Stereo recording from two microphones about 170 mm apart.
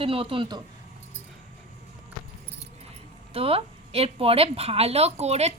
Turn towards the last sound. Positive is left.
turn(degrees=-40)  # may be behind; listen again after turning